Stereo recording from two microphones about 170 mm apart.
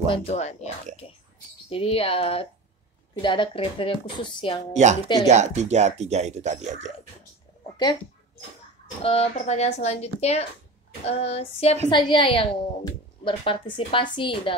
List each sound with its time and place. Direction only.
0.1 s speech: 40° left (ahead or behind)
1.0 s rodents: 35° left (ahead or behind)
1.7 s a woman's voice: 35° left (ahead or behind)
5.2 s speech: 40° right (ahead or behind)
7.7 s speech: 25° left (ahead or behind)
9.0 s a woman's voice: 35° left (ahead or behind)